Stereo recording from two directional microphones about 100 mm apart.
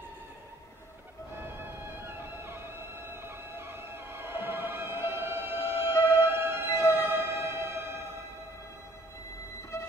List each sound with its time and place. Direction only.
2.0 s music: 25° right (ahead or behind)